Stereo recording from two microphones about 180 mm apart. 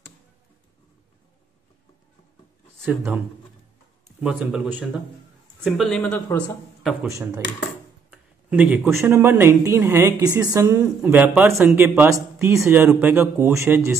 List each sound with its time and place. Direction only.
4.2 s speech: 5° right (ahead or behind)
7.1 s speech: 15° right (ahead or behind)